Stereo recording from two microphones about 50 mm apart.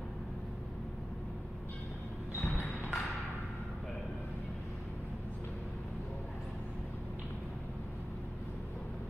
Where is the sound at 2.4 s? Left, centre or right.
Left.